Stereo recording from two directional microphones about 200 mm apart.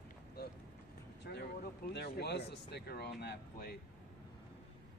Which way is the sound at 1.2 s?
55° left (ahead or behind).